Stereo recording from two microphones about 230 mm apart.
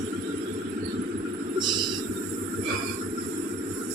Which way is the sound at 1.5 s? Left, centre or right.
Centre.